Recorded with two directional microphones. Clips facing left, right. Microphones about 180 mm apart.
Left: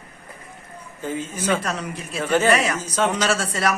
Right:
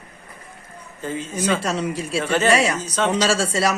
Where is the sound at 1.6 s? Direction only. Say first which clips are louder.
Right 5 dB; 30° right (ahead or behind).